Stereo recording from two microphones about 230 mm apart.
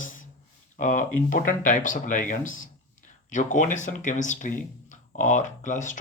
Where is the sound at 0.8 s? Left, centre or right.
Left.